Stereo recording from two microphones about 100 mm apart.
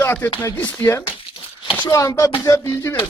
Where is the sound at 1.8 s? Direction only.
35° left (ahead or behind).